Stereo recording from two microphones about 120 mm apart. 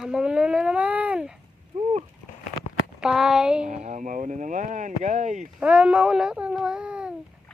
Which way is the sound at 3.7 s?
75° right (ahead or behind).